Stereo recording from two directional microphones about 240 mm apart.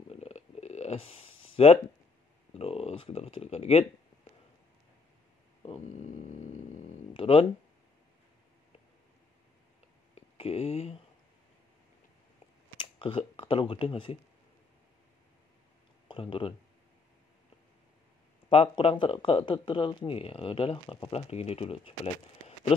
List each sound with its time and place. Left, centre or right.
0.1 s a sound: left
2.5 s speech: left
7.2 s a sound: left
10.3 s speech: left
12.7 s speech: left
16.1 s speech: left
18.5 s speech: left